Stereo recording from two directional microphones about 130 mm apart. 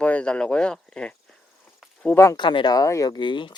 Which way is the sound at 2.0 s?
20° left (ahead or behind).